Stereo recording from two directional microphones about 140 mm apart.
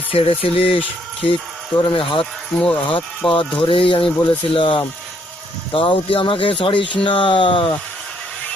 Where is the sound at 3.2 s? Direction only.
40° left (ahead or behind).